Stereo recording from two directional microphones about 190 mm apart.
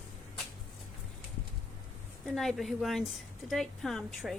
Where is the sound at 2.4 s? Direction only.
Centre (ahead or behind).